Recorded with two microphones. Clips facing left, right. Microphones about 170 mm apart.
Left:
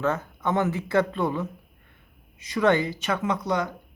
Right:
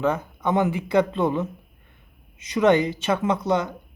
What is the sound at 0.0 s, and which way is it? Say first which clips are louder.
Speech: right 3 dB; 15° right (ahead or behind).